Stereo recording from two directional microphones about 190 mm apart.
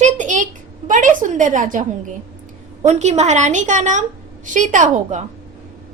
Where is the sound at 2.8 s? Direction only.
35° right (ahead or behind).